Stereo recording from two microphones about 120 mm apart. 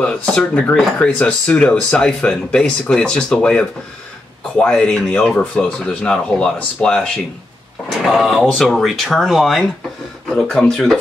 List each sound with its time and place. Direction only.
0.0 s speech: 5° left (ahead or behind)
8.1 s speech: centre (ahead or behind)